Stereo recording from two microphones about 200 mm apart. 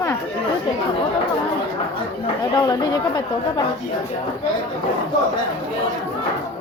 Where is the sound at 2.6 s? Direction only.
20° left (ahead or behind).